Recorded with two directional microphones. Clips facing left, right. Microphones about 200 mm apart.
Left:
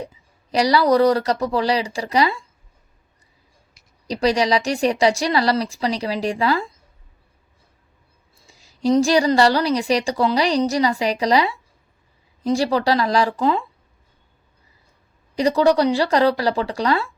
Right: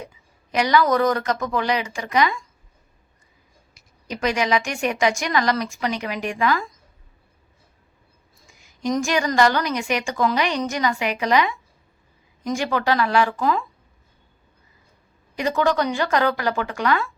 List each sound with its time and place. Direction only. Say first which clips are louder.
0.0 s a woman's voice: left 5 dB; 35° left (ahead or behind)
4.0 s a woman's voice: left 4 dB; 35° left (ahead or behind)
8.4 s a woman's voice: left 6 dB; 35° left (ahead or behind)
15.4 s a woman's voice: left 5 dB; 35° left (ahead or behind)